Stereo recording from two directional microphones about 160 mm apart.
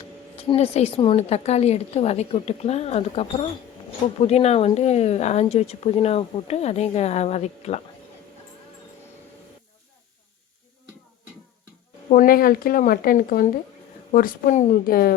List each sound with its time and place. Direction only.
0.3 s speech: 40° left (ahead or behind)
12.1 s speech: 65° left (ahead or behind)